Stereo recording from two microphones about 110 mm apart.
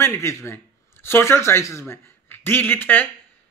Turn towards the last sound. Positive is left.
turn(degrees=15)  # may be behind; listen again after turning